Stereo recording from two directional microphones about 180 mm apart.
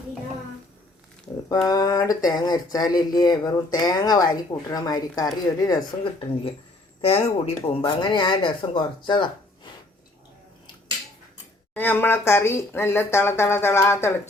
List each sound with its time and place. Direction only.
1.6 s speech: 20° left (ahead or behind)
11.7 s speech: 10° left (ahead or behind)